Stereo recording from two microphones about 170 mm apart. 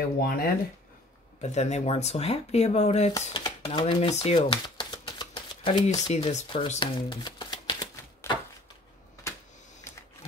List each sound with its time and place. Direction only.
0.2 s speech: 65° left (ahead or behind)
1.4 s speech: 40° left (ahead or behind)
3.1 s speech: 20° left (ahead or behind); by 4.4 s 40° left (ahead or behind)
4.4 s typewriter: 25° left (ahead or behind)
9.9 s sewing machine: 15° left (ahead or behind)